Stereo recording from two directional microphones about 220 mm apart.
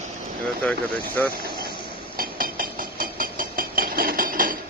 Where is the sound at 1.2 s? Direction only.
10° left (ahead or behind).